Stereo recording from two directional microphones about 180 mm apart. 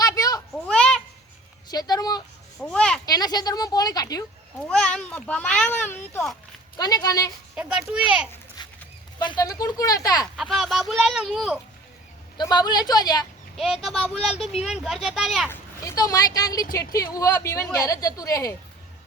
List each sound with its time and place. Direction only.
0.0 s a sound: 20° left (ahead or behind)
0.5 s a sound: 5° left (ahead or behind)
1.6 s speech: 20° left (ahead or behind)
2.6 s speech: 5° left (ahead or behind)
3.1 s a woman's voice: 20° left (ahead or behind)
4.6 s a child's voice: 5° left (ahead or behind)
7.5 s speech: 5° right (ahead or behind)
8.6 s a sound: 25° left (ahead or behind)
9.1 s a woman's voice: 25° left (ahead or behind)
10.3 s speech: centre (ahead or behind)
12.4 s a woman's voice: 25° left (ahead or behind)
13.8 s speech: centre (ahead or behind)
15.4 s a woman's voice: 15° left (ahead or behind)